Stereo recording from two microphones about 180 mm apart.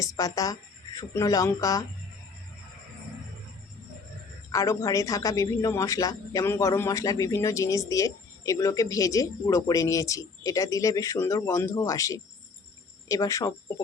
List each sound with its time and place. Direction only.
0.0 s speech: 20° left (ahead or behind)
4.5 s a man's voice: 15° left (ahead or behind)